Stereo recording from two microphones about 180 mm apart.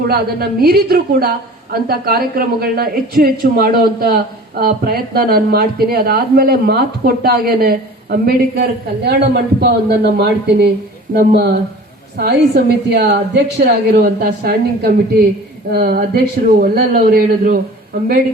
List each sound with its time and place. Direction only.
0.1 s a woman's voice: 60° right (ahead or behind)